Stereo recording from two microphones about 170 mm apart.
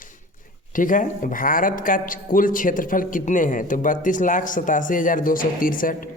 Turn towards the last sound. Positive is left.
turn(degrees=55)  # may be behind; listen again after turning